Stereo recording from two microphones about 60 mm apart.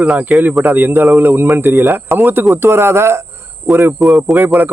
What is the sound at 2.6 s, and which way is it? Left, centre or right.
Speech, right.